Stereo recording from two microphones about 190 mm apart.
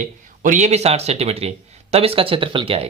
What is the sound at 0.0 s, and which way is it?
Speech, 40° right (ahead or behind).